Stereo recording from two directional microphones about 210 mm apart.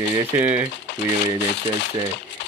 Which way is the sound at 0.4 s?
10° right (ahead or behind).